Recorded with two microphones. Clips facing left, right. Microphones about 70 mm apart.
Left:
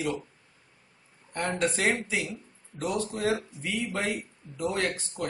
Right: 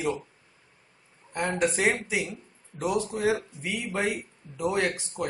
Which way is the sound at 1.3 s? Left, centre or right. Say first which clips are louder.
Right 2 dB; centre.